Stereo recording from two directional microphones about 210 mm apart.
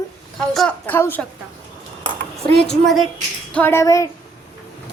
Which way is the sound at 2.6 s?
Centre (ahead or behind).